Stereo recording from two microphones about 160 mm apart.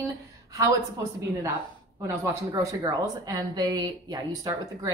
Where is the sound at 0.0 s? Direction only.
20° right (ahead or behind).